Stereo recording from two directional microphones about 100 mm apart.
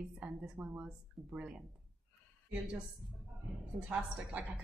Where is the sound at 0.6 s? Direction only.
45° right (ahead or behind).